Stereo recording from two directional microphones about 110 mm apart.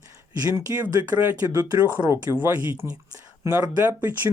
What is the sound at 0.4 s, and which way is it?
Speech, 25° right (ahead or behind).